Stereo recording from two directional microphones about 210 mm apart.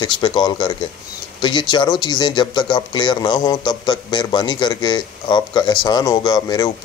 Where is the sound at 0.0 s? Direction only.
20° left (ahead or behind).